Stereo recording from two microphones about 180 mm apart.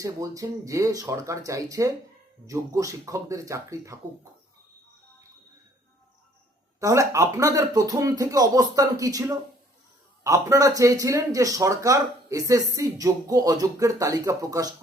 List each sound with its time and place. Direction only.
0.0 s speech: 20° right (ahead or behind)
6.7 s speech: 15° right (ahead or behind)